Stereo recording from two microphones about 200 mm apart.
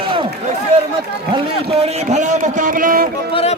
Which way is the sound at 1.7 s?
30° right (ahead or behind).